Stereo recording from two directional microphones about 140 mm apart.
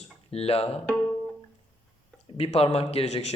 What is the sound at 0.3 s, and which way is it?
Speech, 45° left (ahead or behind).